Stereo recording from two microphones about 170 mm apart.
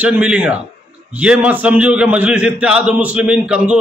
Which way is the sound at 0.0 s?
5° right (ahead or behind).